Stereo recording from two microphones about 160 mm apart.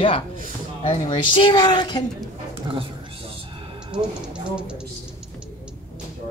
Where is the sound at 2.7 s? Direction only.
35° right (ahead or behind).